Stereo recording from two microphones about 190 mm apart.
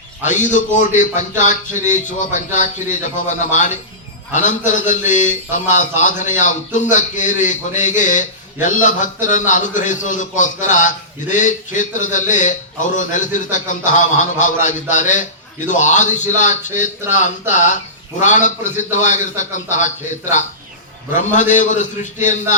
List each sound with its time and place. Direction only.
0.3 s a man's voice: 40° left (ahead or behind)
21.1 s a man's voice: 40° left (ahead or behind)